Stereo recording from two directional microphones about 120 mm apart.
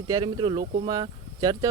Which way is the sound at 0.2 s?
40° right (ahead or behind).